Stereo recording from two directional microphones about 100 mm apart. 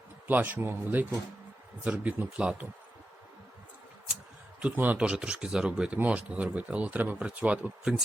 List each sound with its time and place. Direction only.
0.3 s speech: 20° right (ahead or behind)
4.6 s speech: 15° right (ahead or behind)